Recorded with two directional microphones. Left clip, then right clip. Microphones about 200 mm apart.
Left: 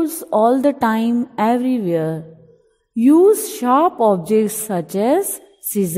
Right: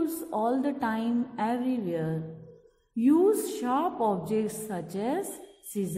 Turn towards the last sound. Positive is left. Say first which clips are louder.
# left 13 dB
turn(degrees=45)  # may be behind; listen again after turning